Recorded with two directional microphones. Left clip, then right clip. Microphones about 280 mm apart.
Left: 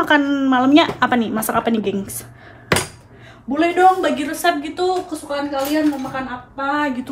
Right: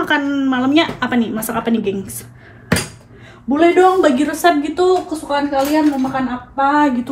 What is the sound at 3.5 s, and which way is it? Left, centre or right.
A woman's voice, centre.